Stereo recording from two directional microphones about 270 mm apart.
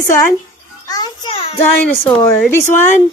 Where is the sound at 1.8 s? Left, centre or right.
Centre.